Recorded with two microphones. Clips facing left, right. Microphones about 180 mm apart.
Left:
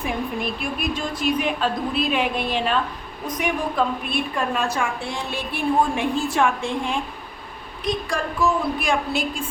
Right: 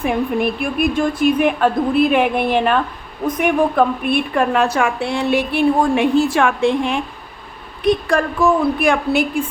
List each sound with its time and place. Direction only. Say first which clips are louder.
0.0 s a woman's voice: right 8 dB; 60° right (ahead or behind)
8.1 s speech: right 7 dB; 60° right (ahead or behind)